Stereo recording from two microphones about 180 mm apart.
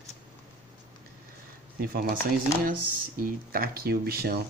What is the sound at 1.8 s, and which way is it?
Speech, 60° right (ahead or behind).